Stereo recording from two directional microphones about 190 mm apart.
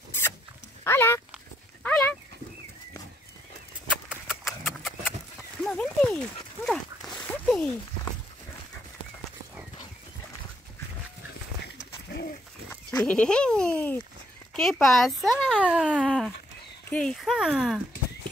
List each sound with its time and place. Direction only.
0.8 s speech: 10° left (ahead or behind)
1.8 s dog: 5° left (ahead or behind)
4.1 s horse: centre (ahead or behind)
5.6 s a sound: 5° left (ahead or behind)
11.6 s a sound: 60° left (ahead or behind)
12.6 s goat: 5° left (ahead or behind)
14.5 s speech: centre (ahead or behind)
15.6 s speech: 5° right (ahead or behind)